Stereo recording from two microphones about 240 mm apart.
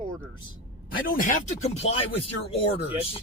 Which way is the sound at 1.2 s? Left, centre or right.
Left.